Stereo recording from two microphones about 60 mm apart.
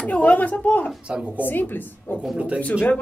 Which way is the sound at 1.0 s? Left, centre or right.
Centre.